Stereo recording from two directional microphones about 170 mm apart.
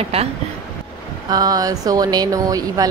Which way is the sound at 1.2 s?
20° right (ahead or behind).